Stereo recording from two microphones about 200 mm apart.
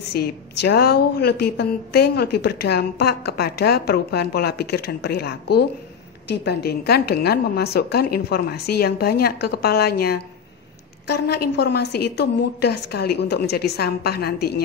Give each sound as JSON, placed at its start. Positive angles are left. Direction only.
{"t": 0.1, "sound": "a woman's voice", "side_deg": 55}